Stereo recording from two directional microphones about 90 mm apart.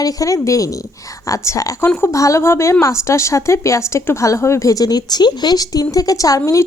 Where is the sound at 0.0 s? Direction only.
40° left (ahead or behind).